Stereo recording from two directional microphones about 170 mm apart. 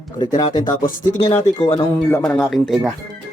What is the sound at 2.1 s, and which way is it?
Speech, 10° left (ahead or behind).